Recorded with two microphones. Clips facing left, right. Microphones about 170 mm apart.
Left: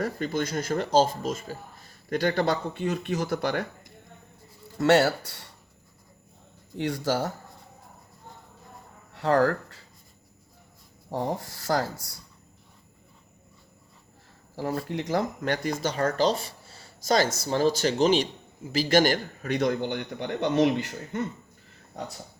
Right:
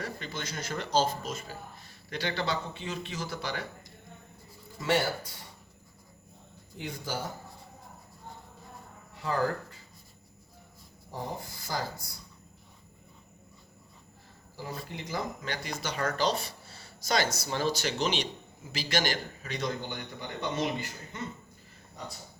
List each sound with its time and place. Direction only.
0.0 s speech: 50° left (ahead or behind)
4.8 s speech: 80° left
6.7 s speech: 80° left
9.1 s speech: 70° left (ahead or behind)
11.1 s speech: 80° left
14.5 s a man's voice: 70° left (ahead or behind); by 16.0 s 45° left (ahead or behind)
16.3 s a sound: 30° left (ahead or behind)
17.4 s a man's voice: 45° left (ahead or behind); by 21.2 s 60° left (ahead or behind)